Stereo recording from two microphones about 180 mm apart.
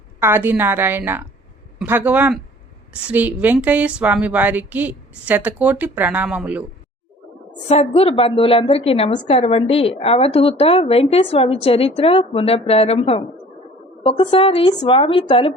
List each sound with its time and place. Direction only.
0.2 s speech: 10° right (ahead or behind)
7.7 s a woman's voice: 35° left (ahead or behind)